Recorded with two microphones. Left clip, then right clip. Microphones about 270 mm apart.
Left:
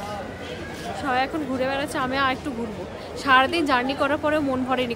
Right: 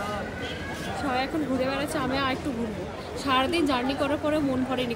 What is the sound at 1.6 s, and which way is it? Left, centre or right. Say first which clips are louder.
Speech: left 6 dB; left.